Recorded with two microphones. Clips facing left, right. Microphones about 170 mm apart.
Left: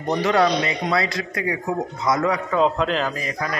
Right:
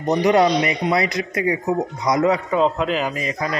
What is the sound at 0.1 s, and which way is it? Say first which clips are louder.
A man's voice: right 3 dB; 20° right (ahead or behind).